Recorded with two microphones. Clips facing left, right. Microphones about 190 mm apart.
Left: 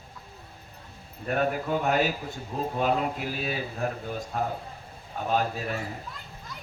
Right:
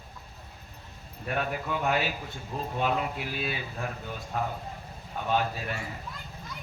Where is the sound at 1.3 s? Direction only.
45° left (ahead or behind).